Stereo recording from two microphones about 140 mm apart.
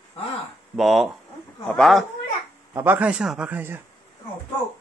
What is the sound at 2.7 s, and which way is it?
Speech, 15° right (ahead or behind).